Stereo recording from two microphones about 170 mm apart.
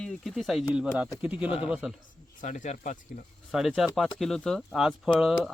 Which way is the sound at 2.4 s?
45° left (ahead or behind).